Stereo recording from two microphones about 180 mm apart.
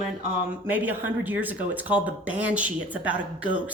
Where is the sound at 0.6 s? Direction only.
10° right (ahead or behind).